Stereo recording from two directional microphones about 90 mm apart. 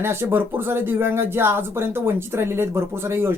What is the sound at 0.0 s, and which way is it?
Speech, 25° right (ahead or behind).